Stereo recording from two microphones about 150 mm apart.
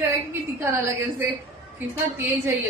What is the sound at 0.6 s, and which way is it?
A woman's voice, 20° right (ahead or behind).